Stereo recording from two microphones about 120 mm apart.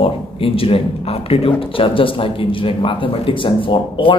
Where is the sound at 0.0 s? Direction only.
50° left (ahead or behind).